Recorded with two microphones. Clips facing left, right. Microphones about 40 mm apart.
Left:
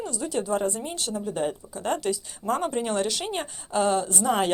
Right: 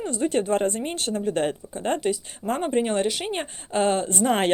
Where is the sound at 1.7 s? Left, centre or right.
Right.